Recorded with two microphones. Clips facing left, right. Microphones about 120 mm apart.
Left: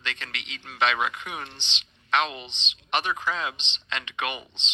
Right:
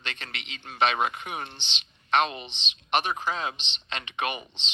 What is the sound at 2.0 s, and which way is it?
Speech, 45° right (ahead or behind).